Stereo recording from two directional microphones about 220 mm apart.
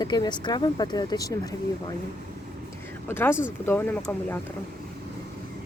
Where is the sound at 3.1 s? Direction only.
10° left (ahead or behind).